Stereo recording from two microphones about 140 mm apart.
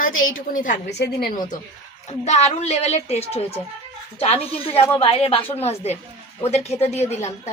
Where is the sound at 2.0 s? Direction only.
50° left (ahead or behind).